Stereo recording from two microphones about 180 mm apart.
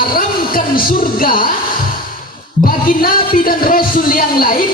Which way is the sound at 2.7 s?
50° left (ahead or behind).